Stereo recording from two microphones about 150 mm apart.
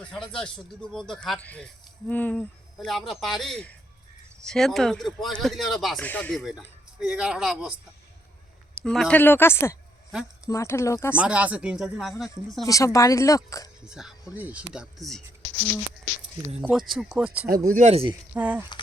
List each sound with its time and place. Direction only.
0.0 s speech: 5° left (ahead or behind)
6.1 s speech: 10° left (ahead or behind)
6.3 s speech: centre (ahead or behind)
8.8 s speech: 5° left (ahead or behind)
11.2 s speech: 10° right (ahead or behind)
12.6 s speech: 20° left (ahead or behind)
13.8 s speech: 5° right (ahead or behind)
16.6 s speech: 5° right (ahead or behind)
17.7 s speech: 55° right (ahead or behind)
18.3 s speech: 10° right (ahead or behind)